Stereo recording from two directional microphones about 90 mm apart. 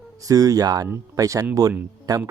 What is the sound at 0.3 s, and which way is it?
Speech, 40° right (ahead or behind).